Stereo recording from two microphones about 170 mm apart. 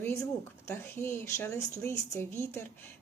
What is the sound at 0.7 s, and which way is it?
Speech, 10° left (ahead or behind).